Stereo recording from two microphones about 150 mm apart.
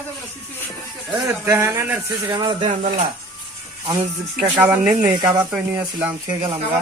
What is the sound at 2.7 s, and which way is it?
Speech, 60° right (ahead or behind).